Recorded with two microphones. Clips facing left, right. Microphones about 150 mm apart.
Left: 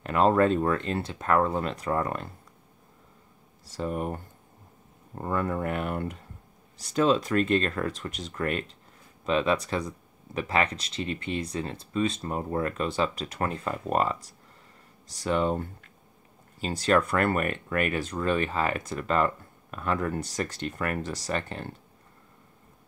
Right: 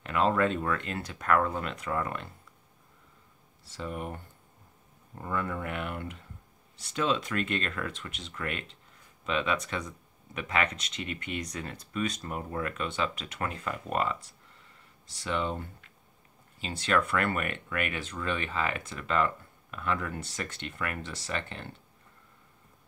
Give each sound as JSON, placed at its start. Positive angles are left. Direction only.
{"t": 0.0, "sound": "speech", "side_deg": 40}
{"t": 3.6, "sound": "speech", "side_deg": 40}